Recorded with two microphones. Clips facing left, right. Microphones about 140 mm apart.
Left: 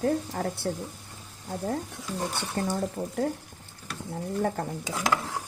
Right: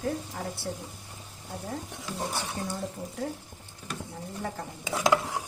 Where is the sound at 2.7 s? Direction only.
55° left (ahead or behind).